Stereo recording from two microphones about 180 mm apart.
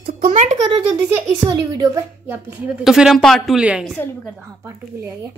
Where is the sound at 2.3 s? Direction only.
5° right (ahead or behind).